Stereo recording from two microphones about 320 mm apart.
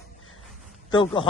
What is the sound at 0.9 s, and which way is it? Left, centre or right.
Speech, centre.